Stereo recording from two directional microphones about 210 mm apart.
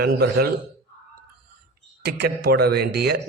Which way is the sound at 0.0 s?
50° right (ahead or behind).